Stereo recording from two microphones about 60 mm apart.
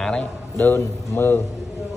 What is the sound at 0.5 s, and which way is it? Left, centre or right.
Speech, left.